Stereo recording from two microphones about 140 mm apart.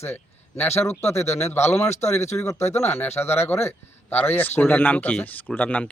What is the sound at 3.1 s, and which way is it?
Speech, 20° left (ahead or behind).